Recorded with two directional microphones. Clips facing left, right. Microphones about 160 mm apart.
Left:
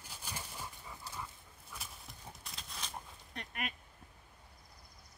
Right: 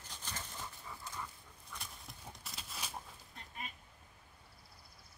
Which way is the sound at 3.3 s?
75° left (ahead or behind).